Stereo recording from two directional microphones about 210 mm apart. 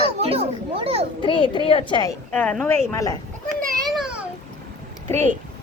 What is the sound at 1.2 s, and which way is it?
Speech, 25° left (ahead or behind).